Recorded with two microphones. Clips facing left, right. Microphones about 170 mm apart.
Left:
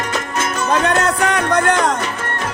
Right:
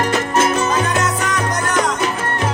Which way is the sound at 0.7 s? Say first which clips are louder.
Left 2 dB; 60° left (ahead or behind).